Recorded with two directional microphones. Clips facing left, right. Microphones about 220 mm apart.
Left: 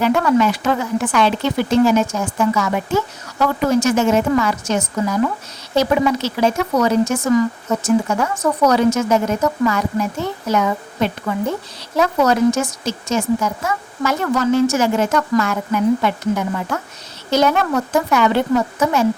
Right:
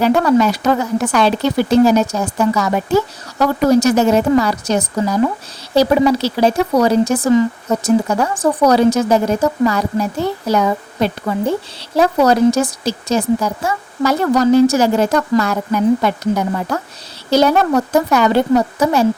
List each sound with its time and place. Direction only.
0.0 s speech: 35° right (ahead or behind)